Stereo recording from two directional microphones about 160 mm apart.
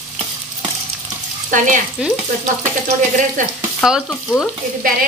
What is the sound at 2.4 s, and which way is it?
Sizzle, 55° right (ahead or behind).